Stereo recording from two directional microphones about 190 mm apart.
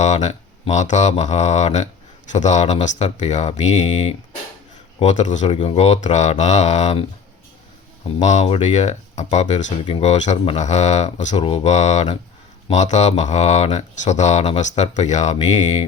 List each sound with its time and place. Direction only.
0.0 s speech: 35° left (ahead or behind)
8.0 s speech: 40° left (ahead or behind)